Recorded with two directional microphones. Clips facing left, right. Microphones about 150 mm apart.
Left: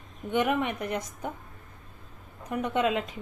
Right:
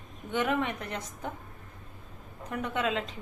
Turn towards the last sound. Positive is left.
turn(degrees=15)  # may be behind; listen again after turning